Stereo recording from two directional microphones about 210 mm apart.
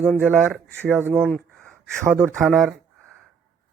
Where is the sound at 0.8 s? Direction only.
10° right (ahead or behind).